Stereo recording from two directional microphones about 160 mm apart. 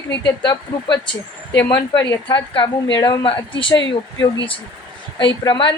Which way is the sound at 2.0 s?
30° left (ahead or behind).